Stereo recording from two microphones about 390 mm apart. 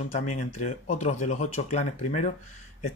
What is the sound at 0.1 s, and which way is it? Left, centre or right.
Speech, centre.